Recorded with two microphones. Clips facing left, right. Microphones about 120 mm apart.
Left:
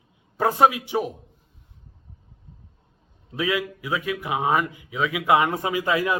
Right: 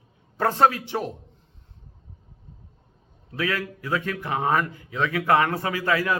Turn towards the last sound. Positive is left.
turn(degrees=20)  # may be behind; listen again after turning